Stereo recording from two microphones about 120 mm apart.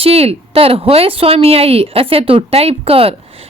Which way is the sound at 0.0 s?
55° right (ahead or behind).